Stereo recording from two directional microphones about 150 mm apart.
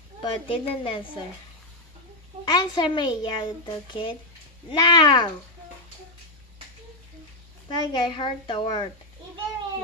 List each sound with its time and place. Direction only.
0.2 s a woman's voice: 35° left (ahead or behind)
2.4 s a woman's voice: 30° left (ahead or behind)
7.6 s a woman's voice: 30° left (ahead or behind)